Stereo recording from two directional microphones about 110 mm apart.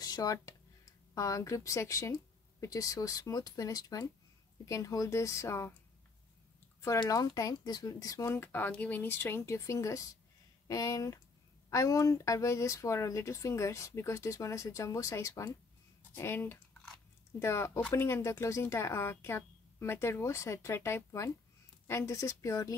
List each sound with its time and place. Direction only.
0.0 s speech: 35° left (ahead or behind)
6.8 s speech: 30° left (ahead or behind)
8.4 s speech: 15° left (ahead or behind)